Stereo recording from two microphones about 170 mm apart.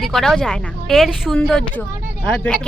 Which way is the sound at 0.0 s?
Centre (ahead or behind).